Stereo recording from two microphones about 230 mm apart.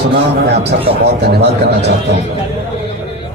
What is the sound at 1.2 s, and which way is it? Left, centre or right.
Speech, right.